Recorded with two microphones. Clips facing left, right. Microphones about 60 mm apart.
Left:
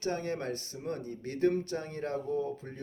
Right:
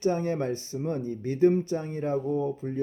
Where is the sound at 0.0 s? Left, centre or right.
Right.